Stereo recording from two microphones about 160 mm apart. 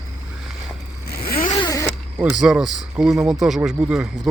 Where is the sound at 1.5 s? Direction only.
20° left (ahead or behind).